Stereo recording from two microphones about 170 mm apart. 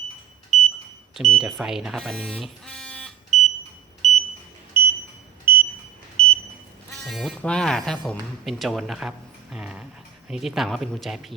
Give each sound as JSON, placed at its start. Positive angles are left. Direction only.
{"t": 0.5, "sound": "smoke detector", "side_deg": 0}
{"t": 1.1, "sound": "speech", "side_deg": 0}
{"t": 4.0, "sound": "smoke detector", "side_deg": 40}
{"t": 4.7, "sound": "smoke detector", "side_deg": 25}
{"t": 6.2, "sound": "smoke detector", "side_deg": 5}
{"t": 7.0, "sound": "speech", "side_deg": 0}